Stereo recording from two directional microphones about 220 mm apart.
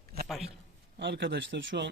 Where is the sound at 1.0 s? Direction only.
50° right (ahead or behind).